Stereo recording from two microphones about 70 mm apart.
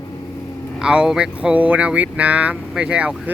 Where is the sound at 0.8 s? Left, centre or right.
Centre.